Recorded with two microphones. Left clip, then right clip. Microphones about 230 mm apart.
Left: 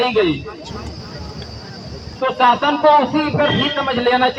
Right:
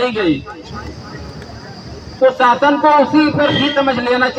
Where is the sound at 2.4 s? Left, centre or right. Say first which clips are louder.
Left 2 dB; right.